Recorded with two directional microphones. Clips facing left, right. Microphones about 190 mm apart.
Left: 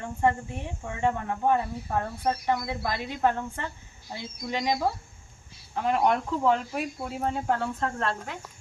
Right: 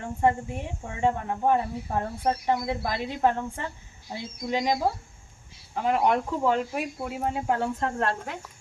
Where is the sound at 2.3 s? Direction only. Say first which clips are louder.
Right 2 dB; 25° right (ahead or behind).